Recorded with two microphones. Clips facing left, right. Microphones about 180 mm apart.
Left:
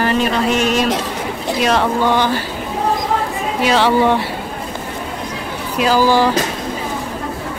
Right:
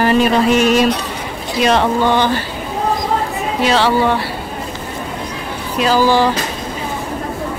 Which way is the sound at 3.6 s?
15° left (ahead or behind).